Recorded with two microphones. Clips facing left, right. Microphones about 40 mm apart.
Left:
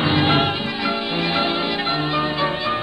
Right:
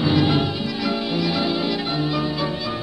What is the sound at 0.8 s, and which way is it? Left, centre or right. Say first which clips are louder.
Music: right 1 dB; left.